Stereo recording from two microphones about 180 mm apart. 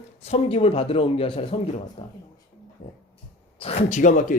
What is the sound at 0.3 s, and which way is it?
Speech, 35° left (ahead or behind).